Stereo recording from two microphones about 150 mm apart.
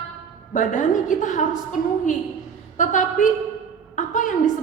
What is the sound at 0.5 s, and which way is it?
A woman's voice, 55° left (ahead or behind).